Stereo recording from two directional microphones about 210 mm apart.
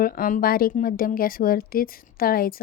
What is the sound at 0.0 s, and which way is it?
Speech, 40° left (ahead or behind).